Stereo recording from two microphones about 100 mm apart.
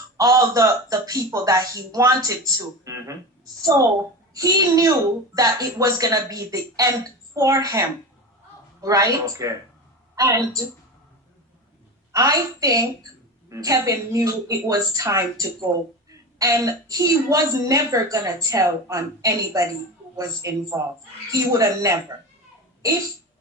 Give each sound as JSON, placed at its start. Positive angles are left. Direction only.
{"t": 0.2, "sound": "a woman's voice", "side_deg": -35}
{"t": 12.1, "sound": "a woman's voice", "side_deg": -40}